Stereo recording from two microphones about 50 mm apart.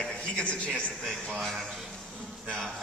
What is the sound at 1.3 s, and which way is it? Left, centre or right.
Speech, centre.